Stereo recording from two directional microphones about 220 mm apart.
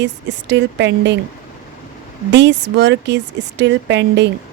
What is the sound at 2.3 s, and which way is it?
Speech, 55° right (ahead or behind).